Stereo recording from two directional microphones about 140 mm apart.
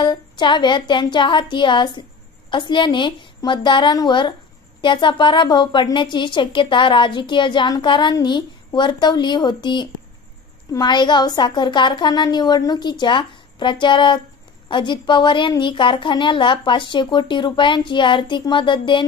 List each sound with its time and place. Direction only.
0.0 s a woman's voice: 35° left (ahead or behind)